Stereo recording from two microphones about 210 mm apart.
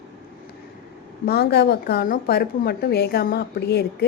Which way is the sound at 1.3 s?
50° left (ahead or behind).